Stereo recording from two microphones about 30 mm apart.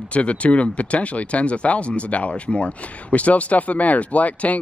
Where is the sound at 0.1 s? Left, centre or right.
Left.